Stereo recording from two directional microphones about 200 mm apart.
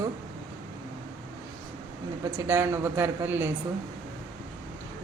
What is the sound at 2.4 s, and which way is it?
A woman's voice, 10° right (ahead or behind).